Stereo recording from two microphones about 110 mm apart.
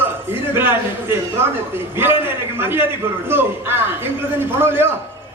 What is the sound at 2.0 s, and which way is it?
A man's voice, 20° right (ahead or behind).